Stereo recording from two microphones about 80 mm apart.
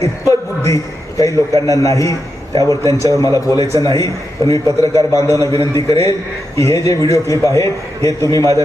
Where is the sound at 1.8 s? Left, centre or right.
Left.